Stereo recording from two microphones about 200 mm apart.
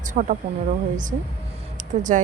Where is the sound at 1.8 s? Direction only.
40° right (ahead or behind).